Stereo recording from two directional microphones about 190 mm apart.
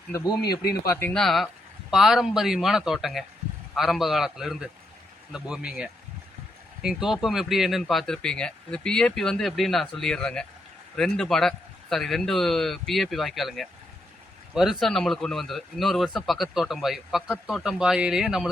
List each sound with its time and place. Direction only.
0.1 s speech: 20° left (ahead or behind); by 18.4 s 5° right (ahead or behind)